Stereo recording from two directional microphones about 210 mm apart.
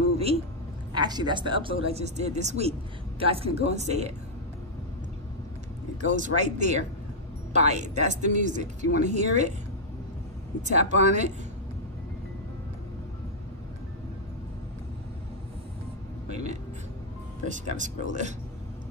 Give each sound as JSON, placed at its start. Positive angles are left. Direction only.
{"t": 0.9, "sound": "speech", "side_deg": -20}
{"t": 6.0, "sound": "speech", "side_deg": -35}
{"t": 10.6, "sound": "speech", "side_deg": -35}
{"t": 16.3, "sound": "a sound", "side_deg": -35}
{"t": 17.5, "sound": "speech", "side_deg": -35}